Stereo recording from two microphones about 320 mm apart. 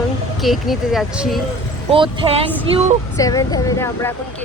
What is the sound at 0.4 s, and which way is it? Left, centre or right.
Speech, centre.